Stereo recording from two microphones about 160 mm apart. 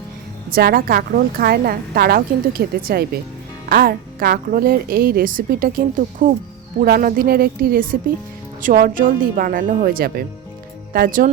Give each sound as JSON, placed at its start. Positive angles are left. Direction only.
{"t": 0.5, "sound": "a woman's voice", "side_deg": -65}